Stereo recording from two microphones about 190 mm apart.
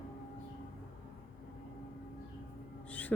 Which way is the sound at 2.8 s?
10° left (ahead or behind).